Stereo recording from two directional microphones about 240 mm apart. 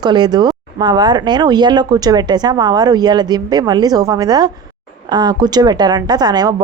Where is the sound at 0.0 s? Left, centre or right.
Centre.